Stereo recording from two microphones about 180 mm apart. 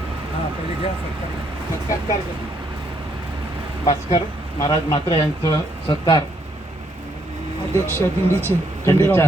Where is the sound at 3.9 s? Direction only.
30° left (ahead or behind).